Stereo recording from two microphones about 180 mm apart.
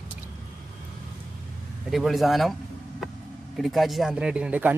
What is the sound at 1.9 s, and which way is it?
Speech, centre (ahead or behind).